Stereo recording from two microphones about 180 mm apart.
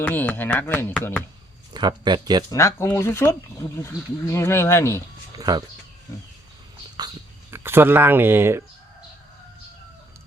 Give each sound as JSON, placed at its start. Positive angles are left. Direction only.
{"t": 0.0, "sound": "speech", "side_deg": 10}
{"t": 1.7, "sound": "speech", "side_deg": -25}
{"t": 2.5, "sound": "speech", "side_deg": 15}
{"t": 5.4, "sound": "speech", "side_deg": -20}
{"t": 7.5, "sound": "speech", "side_deg": -10}